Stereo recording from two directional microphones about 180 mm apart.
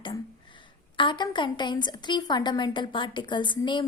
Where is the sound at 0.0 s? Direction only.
25° left (ahead or behind).